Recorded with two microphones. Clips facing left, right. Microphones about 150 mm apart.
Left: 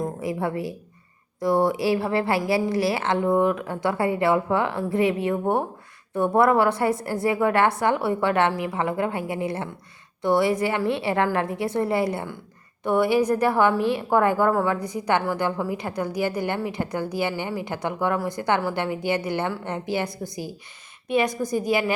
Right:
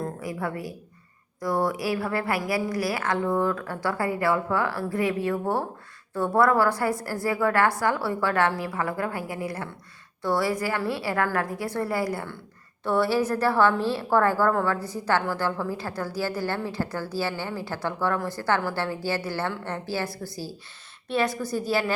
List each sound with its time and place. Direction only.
0.0 s a woman's voice: 25° left (ahead or behind)